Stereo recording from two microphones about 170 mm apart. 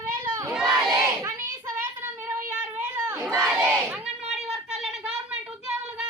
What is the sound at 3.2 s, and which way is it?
Crowd, 5° left (ahead or behind).